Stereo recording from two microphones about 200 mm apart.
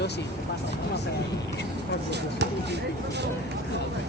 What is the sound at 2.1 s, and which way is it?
Speech, 60° right (ahead or behind).